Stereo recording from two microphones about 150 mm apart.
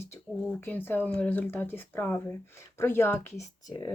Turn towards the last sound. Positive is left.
turn(degrees=25)  # may be behind; listen again after turning